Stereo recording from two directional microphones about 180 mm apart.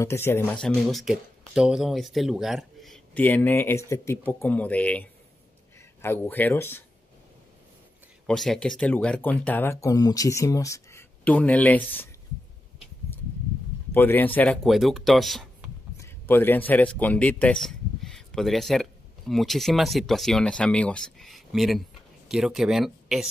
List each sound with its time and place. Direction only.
0.0 s speech: 15° left (ahead or behind)
6.0 s speech: 10° left (ahead or behind)
8.3 s speech: 5° left (ahead or behind)
13.9 s speech: 10° left (ahead or behind)
16.0 s speech: 10° left (ahead or behind)